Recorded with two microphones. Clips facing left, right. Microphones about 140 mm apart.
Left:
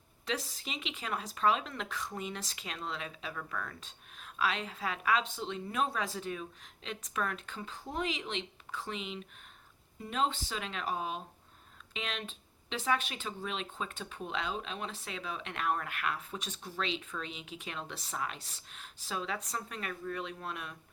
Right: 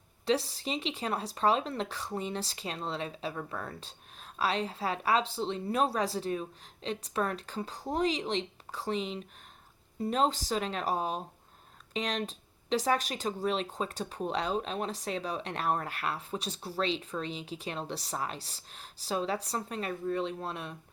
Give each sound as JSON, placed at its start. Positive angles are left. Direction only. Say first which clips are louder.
{"t": 0.3, "sound": "speech", "louder": "right 8 dB", "side_deg": -35}